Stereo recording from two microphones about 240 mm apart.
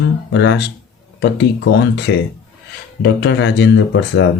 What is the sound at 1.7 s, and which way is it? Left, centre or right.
Speech, left.